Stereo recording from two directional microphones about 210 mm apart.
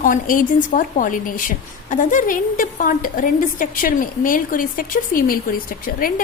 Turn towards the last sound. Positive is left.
turn(degrees=40)  # may be behind; listen again after turning